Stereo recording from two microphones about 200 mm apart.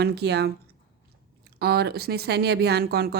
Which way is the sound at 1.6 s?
55° right (ahead or behind).